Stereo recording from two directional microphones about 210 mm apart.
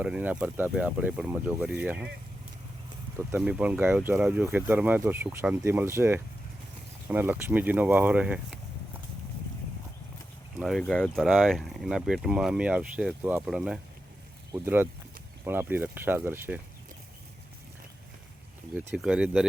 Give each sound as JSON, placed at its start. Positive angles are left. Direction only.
{"t": 0.0, "sound": "speech", "side_deg": -5}
{"t": 3.2, "sound": "speech", "side_deg": -10}
{"t": 10.6, "sound": "speech", "side_deg": 0}
{"t": 18.7, "sound": "speech", "side_deg": -10}